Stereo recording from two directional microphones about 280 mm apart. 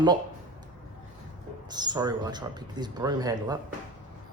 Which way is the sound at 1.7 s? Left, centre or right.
Centre.